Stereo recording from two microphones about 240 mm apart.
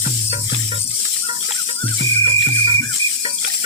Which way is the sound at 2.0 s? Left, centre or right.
Right.